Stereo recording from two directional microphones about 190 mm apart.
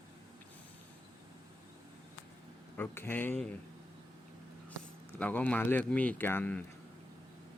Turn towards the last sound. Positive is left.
turn(degrees=10)  # may be behind; listen again after turning